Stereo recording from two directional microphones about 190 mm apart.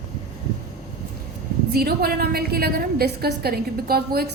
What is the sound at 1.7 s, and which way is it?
A woman's voice, 55° right (ahead or behind).